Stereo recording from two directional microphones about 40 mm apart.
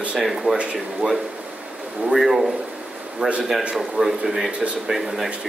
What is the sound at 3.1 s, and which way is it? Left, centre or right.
Speech, right.